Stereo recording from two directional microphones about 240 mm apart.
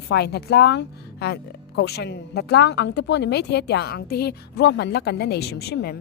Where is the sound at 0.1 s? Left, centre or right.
Left.